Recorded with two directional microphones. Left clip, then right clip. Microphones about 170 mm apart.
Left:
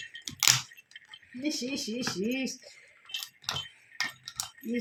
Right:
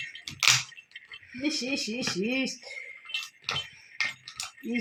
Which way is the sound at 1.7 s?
50° right (ahead or behind).